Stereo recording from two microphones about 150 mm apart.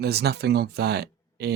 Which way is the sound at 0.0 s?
90° right.